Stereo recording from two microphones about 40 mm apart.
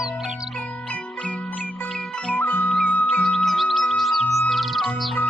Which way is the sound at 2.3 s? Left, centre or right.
Left.